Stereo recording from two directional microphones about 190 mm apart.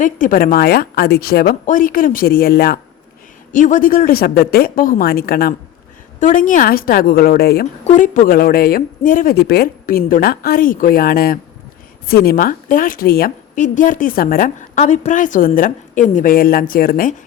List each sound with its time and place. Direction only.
0.0 s a woman's voice: 45° left (ahead or behind)
3.5 s a woman's voice: 40° left (ahead or behind)
6.1 s a woman's voice: 40° left (ahead or behind)
7.9 s a woman's voice: 40° left (ahead or behind)